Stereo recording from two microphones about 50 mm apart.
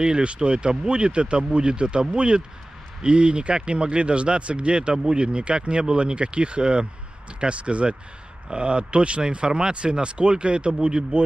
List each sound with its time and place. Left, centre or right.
0.0 s speech: centre